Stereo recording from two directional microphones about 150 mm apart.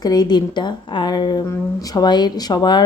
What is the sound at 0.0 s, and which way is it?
A woman's voice, 25° left (ahead or behind).